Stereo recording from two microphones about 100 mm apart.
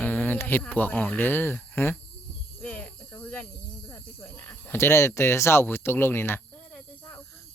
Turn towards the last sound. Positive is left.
turn(degrees=20)  # may be behind; listen again after turning